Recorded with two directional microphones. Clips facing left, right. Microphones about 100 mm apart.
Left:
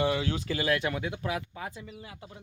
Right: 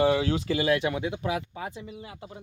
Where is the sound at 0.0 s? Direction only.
30° right (ahead or behind).